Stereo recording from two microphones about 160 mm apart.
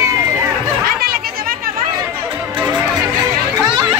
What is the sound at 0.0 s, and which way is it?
Run, 15° right (ahead or behind).